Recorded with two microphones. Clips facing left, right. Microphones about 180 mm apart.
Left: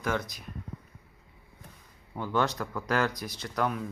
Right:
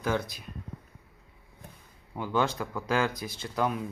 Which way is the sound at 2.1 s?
5° right (ahead or behind).